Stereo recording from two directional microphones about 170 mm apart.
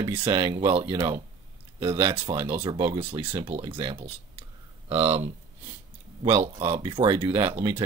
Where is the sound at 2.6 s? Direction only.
25° right (ahead or behind).